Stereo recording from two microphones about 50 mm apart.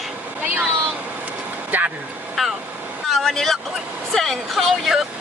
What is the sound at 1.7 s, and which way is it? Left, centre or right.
Vehicle, right.